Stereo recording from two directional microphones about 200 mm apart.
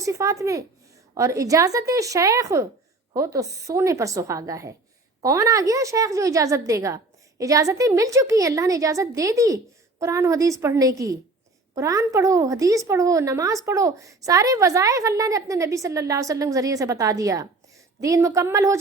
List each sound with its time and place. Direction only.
0.0 s a woman's voice: 15° right (ahead or behind)